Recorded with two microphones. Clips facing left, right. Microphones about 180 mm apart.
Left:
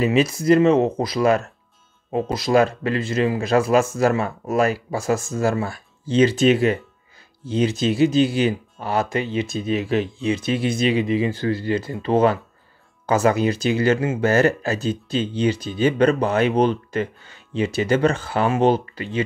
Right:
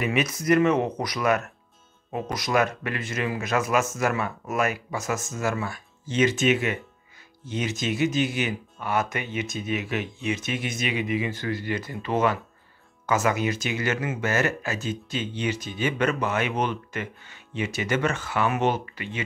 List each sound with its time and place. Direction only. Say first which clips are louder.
0.0 s speech: left 7 dB; 30° left (ahead or behind)